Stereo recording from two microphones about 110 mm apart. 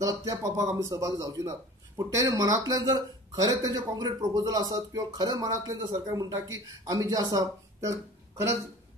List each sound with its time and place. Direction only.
0.0 s speech: 30° right (ahead or behind)